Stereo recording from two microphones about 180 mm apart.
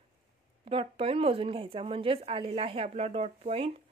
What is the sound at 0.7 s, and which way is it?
Speech, 30° right (ahead or behind).